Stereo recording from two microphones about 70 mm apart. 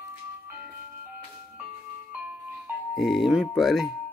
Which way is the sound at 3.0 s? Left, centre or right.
Centre.